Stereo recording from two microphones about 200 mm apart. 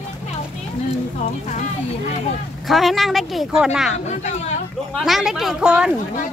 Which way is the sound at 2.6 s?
Centre (ahead or behind).